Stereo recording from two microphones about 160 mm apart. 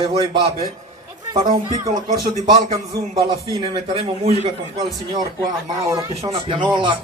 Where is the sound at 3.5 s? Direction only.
30° right (ahead or behind).